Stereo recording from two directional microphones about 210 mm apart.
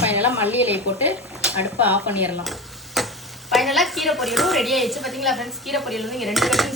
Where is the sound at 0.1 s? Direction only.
10° right (ahead or behind).